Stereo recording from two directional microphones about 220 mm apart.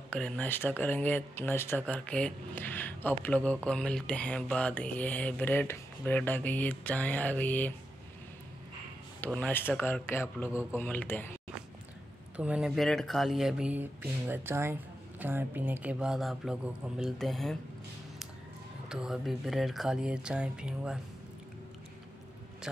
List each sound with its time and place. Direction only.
0.1 s speech: 5° left (ahead or behind)
9.2 s speech: 5° left (ahead or behind)
10.5 s speech: 5° right (ahead or behind)
10.8 s speech: 10° left (ahead or behind)
12.4 s speech: 5° right (ahead or behind)
18.9 s speech: 5° right (ahead or behind)